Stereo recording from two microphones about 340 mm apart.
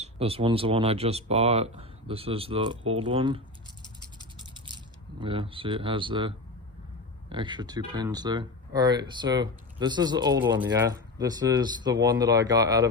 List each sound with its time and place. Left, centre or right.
0.0 s speech: centre
4.5 s a sound: centre
5.2 s speech: centre